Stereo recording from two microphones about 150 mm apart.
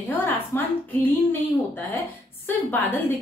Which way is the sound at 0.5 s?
15° left (ahead or behind).